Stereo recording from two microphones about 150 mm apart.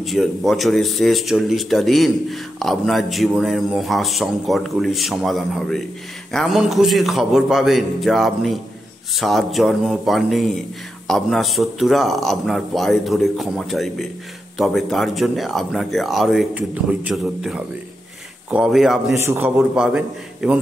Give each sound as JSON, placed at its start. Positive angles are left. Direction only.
{"t": 0.0, "sound": "speech", "side_deg": 0}
{"t": 19.1, "sound": "a man's voice", "side_deg": -15}
{"t": 19.7, "sound": "a man's voice", "side_deg": -5}